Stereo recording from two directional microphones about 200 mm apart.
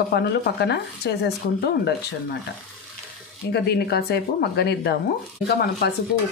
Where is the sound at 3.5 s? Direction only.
55° left (ahead or behind).